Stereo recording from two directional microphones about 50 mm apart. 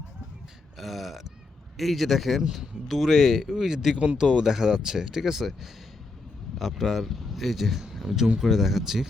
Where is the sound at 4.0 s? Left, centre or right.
Right.